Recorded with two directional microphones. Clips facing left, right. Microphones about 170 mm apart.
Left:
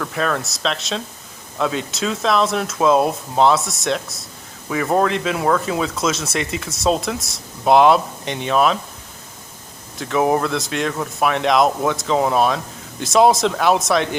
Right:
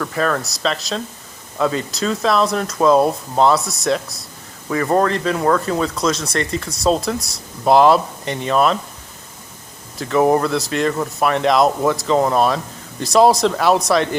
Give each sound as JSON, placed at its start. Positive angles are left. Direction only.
{"t": 0.0, "sound": "speech", "side_deg": 0}
{"t": 10.0, "sound": "speech", "side_deg": 0}